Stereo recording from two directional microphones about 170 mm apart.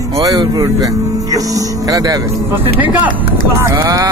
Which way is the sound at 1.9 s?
20° right (ahead or behind).